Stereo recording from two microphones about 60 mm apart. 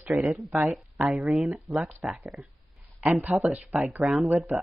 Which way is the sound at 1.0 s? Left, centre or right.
Right.